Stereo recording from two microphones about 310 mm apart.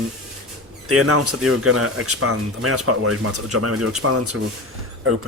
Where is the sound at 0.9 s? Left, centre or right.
Right.